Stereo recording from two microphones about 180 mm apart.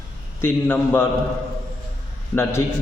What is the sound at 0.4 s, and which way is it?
Speech, 10° left (ahead or behind).